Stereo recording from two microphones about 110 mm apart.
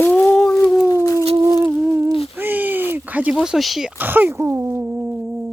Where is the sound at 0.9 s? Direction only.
30° left (ahead or behind).